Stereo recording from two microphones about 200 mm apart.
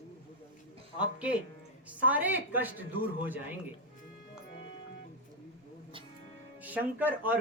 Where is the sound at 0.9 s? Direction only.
5° right (ahead or behind).